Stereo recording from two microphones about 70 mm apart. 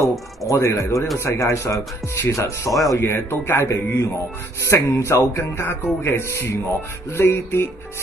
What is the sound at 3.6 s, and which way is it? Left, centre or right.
Speech, left.